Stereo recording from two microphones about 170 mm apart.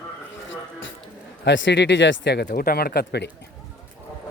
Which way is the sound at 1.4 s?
90° left.